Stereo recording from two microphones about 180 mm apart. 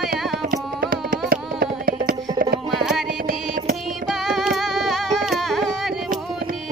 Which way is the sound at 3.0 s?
55° right (ahead or behind).